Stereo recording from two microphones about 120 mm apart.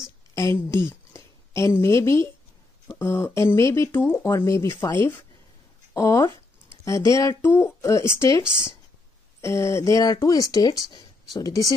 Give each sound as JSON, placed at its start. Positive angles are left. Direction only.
{"t": 0.3, "sound": "a woman's voice", "side_deg": 25}